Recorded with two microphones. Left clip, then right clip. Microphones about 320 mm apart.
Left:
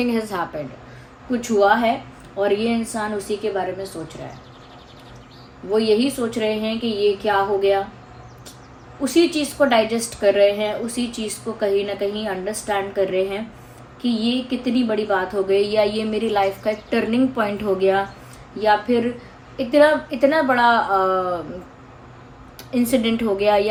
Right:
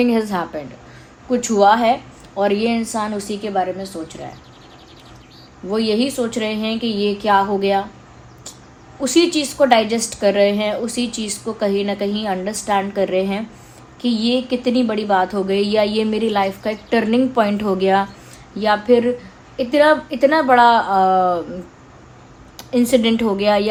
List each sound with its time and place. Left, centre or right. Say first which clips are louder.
0.0 s a woman's voice: right 4 dB; right
5.7 s a woman's voice: left 1 dB; right
9.0 s a woman's voice: right 2 dB; right
22.5 s a woman's voice: right 5 dB; right